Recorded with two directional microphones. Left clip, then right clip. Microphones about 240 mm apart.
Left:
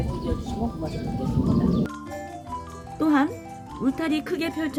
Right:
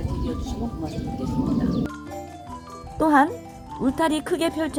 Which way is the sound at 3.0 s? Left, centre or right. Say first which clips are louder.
Right 4 dB; centre.